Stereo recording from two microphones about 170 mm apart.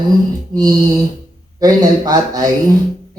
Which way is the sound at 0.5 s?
25° right (ahead or behind).